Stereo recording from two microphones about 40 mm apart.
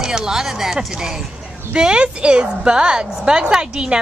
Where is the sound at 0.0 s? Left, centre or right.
Centre.